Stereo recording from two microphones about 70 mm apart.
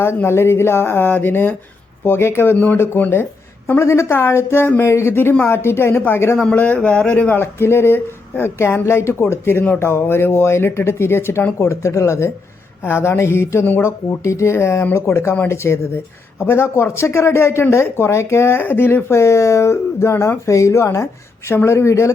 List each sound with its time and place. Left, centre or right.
0.0 s speech: left
6.6 s speech: centre; by 22.1 s left